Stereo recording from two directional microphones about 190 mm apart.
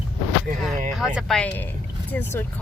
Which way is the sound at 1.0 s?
5° right (ahead or behind).